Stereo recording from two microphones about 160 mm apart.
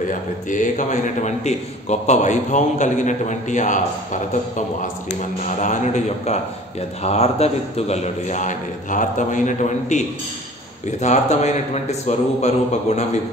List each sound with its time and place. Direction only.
0.1 s a man's voice: 55° left (ahead or behind)